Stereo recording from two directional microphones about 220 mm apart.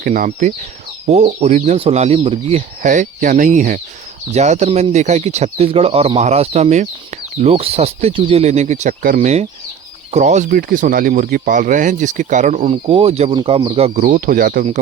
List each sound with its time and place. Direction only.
0.0 s speech: 40° right (ahead or behind)